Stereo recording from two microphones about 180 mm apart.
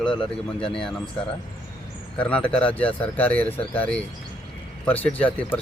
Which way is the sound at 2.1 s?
5° left (ahead or behind).